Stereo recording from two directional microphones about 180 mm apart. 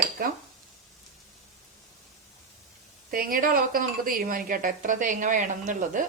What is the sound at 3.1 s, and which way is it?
A woman's voice, 50° right (ahead or behind).